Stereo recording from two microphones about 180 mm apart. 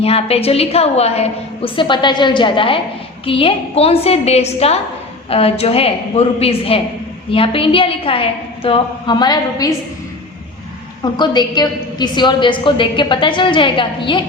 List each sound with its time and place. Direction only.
0.0 s a woman's voice: 35° left (ahead or behind)
11.0 s a woman's voice: 25° left (ahead or behind)